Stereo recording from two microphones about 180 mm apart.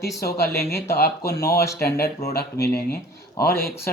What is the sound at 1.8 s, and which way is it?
Speech, 60° left (ahead or behind).